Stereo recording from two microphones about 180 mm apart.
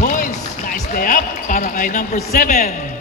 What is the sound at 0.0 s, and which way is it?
Basketball bounce, 50° left (ahead or behind).